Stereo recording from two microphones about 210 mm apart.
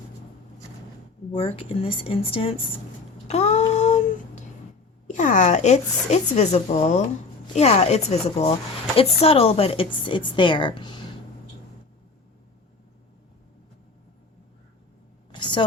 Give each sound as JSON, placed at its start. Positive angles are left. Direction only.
{"t": 1.3, "sound": "a woman's voice", "side_deg": 25}
{"t": 3.2, "sound": "child singing", "side_deg": 30}
{"t": 5.1, "sound": "a woman's voice", "side_deg": 35}
{"t": 15.3, "sound": "a sound", "side_deg": 20}